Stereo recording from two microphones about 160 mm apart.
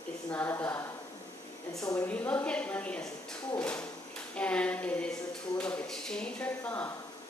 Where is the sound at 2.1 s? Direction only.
10° left (ahead or behind).